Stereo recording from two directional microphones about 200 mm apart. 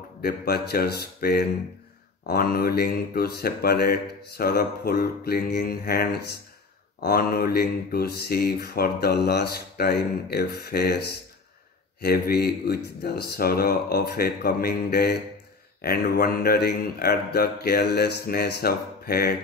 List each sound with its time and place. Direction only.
0.2 s mantra: 50° left (ahead or behind)